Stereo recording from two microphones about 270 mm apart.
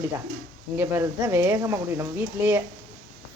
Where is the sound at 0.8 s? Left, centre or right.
Centre.